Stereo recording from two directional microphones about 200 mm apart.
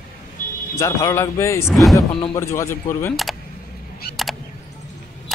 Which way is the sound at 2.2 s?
15° left (ahead or behind).